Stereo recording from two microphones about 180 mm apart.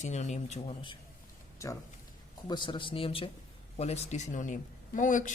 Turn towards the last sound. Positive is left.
turn(degrees=45)  # may be behind; listen again after turning